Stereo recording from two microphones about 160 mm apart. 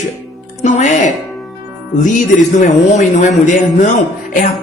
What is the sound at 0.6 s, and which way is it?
Music, 50° left (ahead or behind).